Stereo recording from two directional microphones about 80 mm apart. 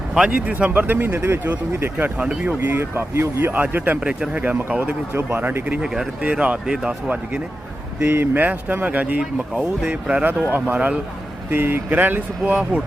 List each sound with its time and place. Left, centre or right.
0.1 s speech: centre
2.6 s speech: right
5.8 s speech: centre
8.0 s speech: right